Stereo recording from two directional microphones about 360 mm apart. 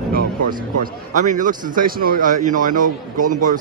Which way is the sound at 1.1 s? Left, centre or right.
Right.